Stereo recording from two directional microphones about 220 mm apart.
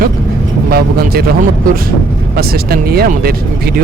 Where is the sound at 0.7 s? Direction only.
45° right (ahead or behind).